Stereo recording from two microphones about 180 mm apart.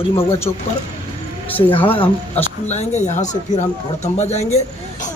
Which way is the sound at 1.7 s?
30° left (ahead or behind).